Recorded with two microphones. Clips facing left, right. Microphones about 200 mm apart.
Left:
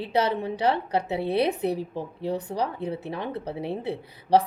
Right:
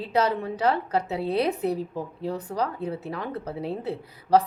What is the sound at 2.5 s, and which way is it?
A woman's voice, 20° left (ahead or behind).